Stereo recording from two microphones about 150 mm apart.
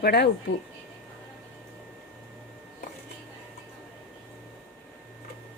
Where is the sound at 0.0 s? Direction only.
90° left.